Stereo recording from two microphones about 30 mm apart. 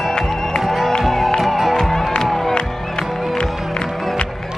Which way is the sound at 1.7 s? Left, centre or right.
Centre.